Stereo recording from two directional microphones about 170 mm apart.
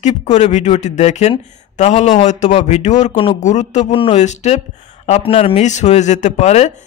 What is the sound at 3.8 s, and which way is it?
Speech, 30° left (ahead or behind).